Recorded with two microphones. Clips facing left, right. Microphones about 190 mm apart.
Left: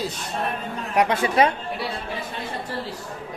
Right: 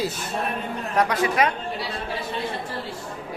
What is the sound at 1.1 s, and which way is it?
Speech, 30° left (ahead or behind).